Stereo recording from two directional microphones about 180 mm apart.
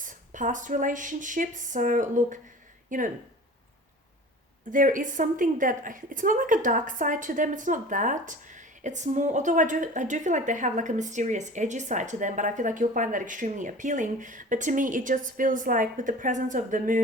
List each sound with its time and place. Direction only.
0.0 s a woman's voice: 45° right (ahead or behind)
4.7 s a woman's voice: 45° right (ahead or behind)